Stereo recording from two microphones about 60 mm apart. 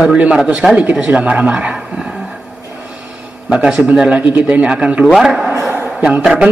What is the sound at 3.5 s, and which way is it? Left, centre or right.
Speech, centre.